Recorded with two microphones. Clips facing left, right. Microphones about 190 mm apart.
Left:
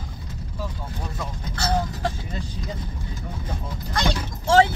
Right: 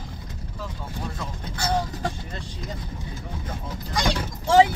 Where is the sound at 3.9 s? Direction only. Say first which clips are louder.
Even; 15° right (ahead or behind).